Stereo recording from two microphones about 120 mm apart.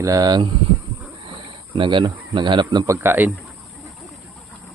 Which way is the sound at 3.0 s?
15° right (ahead or behind).